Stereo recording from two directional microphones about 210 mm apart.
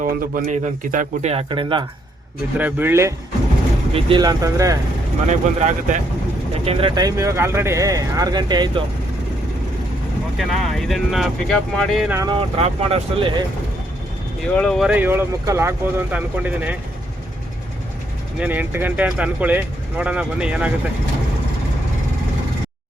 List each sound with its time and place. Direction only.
0.0 s speech: 35° right (ahead or behind)
2.6 s speech: 10° right (ahead or behind)
5.3 s speech: 35° right (ahead or behind)
10.3 s speech: centre (ahead or behind)
12.1 s speech: 15° right (ahead or behind)
12.6 s speech: 25° right (ahead or behind)
14.5 s speech: 5° left (ahead or behind)
18.3 s speech: 10° right (ahead or behind)